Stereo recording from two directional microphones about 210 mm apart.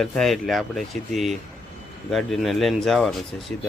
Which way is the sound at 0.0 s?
Centre (ahead or behind).